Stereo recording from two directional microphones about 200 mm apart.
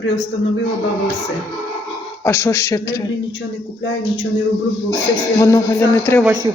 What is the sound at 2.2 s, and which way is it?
Speech, 15° left (ahead or behind).